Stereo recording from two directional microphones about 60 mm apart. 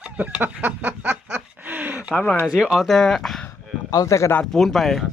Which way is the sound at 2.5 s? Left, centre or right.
Centre.